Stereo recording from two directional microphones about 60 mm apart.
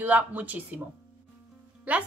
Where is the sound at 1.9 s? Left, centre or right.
Right.